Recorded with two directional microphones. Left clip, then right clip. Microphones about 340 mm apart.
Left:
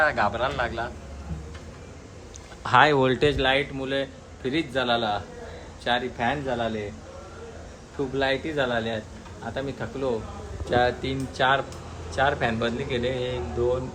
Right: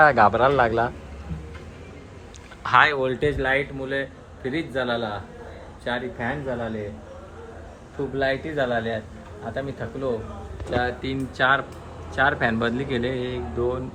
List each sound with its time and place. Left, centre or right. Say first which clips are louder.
0.0 s a man's voice: right 7 dB; centre
2.6 s speech: even; centre
3.4 s a man's voice: even; centre
8.1 s a man's voice: right 1 dB; centre
10.7 s speech: left 3 dB; centre
11.0 s a man's voice: right 2 dB; centre